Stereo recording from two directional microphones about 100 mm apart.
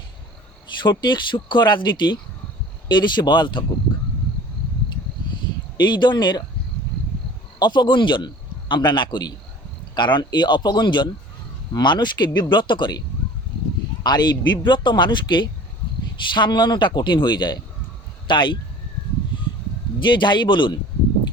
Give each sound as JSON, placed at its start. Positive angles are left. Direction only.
{"t": 0.8, "sound": "a man's voice", "side_deg": 50}
{"t": 5.7, "sound": "a man's voice", "side_deg": 45}
{"t": 7.6, "sound": "a man's voice", "side_deg": 50}
{"t": 14.0, "sound": "a man's voice", "side_deg": 45}
{"t": 20.0, "sound": "a man's voice", "side_deg": 55}